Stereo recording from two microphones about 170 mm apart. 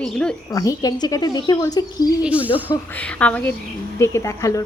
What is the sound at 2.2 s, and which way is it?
Speech, 5° right (ahead or behind).